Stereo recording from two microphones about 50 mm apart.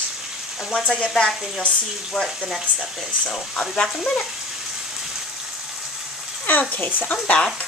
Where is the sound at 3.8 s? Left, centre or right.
Centre.